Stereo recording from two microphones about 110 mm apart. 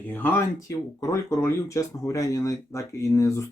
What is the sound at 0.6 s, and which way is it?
Speech, 30° left (ahead or behind).